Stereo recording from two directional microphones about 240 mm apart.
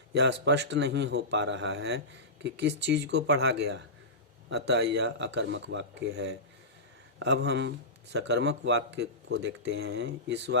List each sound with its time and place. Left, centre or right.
0.1 s speech: right